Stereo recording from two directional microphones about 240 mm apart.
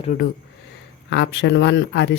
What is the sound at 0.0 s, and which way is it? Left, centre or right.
Speech, left.